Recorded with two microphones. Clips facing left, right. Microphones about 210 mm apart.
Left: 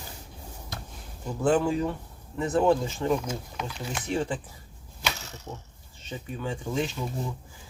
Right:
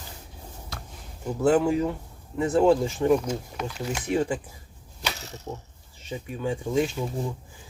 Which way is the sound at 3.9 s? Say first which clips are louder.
Right 3 dB; 10° right (ahead or behind).